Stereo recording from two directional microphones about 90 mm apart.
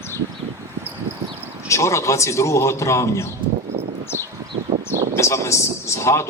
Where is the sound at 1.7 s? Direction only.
35° left (ahead or behind).